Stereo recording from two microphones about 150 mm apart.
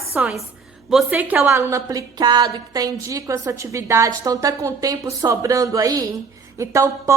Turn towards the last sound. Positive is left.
turn(degrees=-20)  # may be behind; listen again after turning